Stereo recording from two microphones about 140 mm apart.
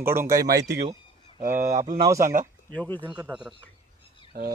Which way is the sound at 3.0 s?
10° right (ahead or behind).